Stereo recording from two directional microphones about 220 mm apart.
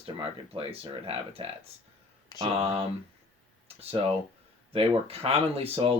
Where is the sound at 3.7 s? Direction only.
25° right (ahead or behind).